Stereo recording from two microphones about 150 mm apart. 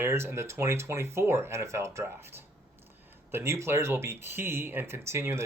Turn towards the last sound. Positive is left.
turn(degrees=-15)  # may be behind; listen again after turning